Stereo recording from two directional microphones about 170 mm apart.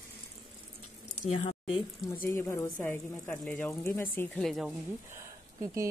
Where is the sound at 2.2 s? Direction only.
15° left (ahead or behind).